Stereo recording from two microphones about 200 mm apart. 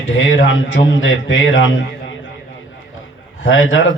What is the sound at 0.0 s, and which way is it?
A man's voice, 70° left (ahead or behind).